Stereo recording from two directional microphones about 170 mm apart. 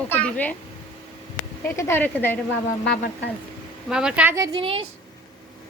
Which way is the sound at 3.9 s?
5° right (ahead or behind).